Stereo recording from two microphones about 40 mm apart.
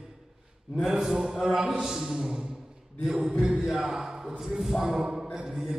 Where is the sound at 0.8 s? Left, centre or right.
Centre.